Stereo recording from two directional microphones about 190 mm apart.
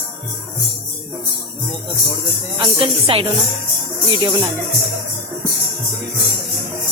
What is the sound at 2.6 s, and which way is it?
A woman's voice, 25° right (ahead or behind).